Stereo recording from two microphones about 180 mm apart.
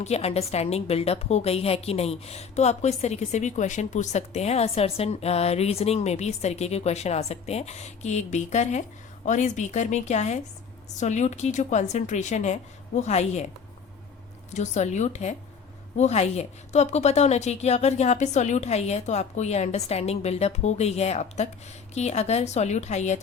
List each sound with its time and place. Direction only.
0.0 s a woman's voice: 35° left (ahead or behind)
14.5 s a woman's voice: 40° left (ahead or behind)